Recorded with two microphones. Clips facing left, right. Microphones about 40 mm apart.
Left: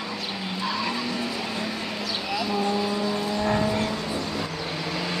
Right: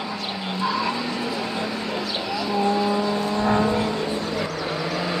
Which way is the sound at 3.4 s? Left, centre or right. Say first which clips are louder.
Right 4 dB; centre.